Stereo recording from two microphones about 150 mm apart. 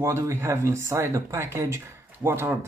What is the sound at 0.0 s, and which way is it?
Speech, 20° right (ahead or behind).